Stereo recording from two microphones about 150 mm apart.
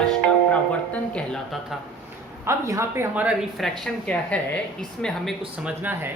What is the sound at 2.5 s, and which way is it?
Speech, 20° right (ahead or behind).